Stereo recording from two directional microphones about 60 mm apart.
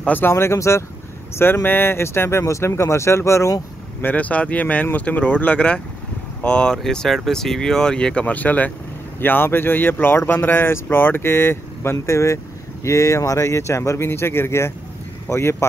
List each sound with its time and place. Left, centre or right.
0.3 s speech: left
1.4 s speech: left
4.0 s speech: left